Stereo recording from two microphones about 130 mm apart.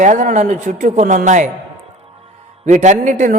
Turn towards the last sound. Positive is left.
turn(degrees=-70)  # may be behind; listen again after turning